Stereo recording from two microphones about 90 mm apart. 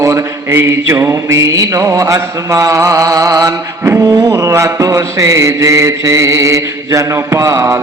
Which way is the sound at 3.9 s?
25° right (ahead or behind).